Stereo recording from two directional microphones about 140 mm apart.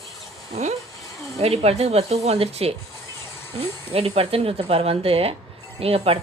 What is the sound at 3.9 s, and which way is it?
A woman's voice, 45° right (ahead or behind).